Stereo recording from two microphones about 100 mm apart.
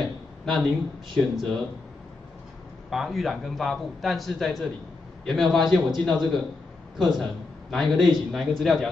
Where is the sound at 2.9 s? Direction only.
Centre (ahead or behind).